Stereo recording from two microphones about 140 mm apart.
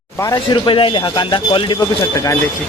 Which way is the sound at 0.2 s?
25° left (ahead or behind).